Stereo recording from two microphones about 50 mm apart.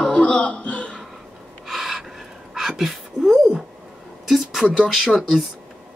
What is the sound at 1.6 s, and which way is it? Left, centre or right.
Gasp, centre.